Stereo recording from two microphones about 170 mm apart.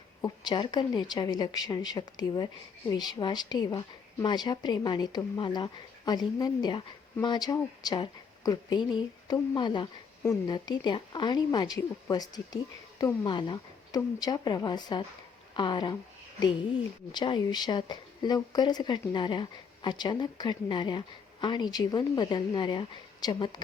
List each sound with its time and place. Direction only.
0.2 s a woman's voice: 25° left (ahead or behind)